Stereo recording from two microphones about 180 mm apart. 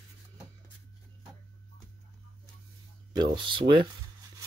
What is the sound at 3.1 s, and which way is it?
Speech, 25° right (ahead or behind).